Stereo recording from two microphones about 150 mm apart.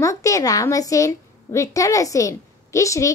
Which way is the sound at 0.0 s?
20° left (ahead or behind).